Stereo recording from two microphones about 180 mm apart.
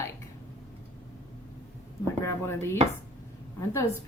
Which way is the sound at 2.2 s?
15° left (ahead or behind).